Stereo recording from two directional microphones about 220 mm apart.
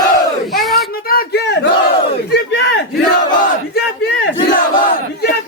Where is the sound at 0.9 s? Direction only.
40° left (ahead or behind).